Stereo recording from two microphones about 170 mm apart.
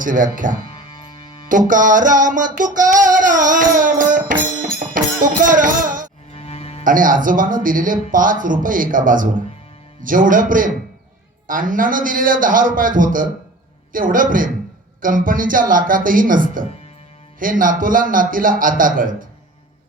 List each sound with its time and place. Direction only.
0.0 s music: 50° right (ahead or behind)
0.7 s music: 30° left (ahead or behind)
1.5 s music: 50° right (ahead or behind)
6.3 s music: 35° left (ahead or behind)
6.8 s music: 55° right (ahead or behind)